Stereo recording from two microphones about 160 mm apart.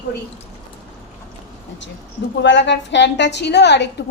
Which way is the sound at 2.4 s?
90° left.